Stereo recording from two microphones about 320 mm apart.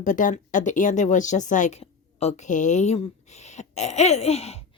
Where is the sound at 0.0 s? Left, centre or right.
Left.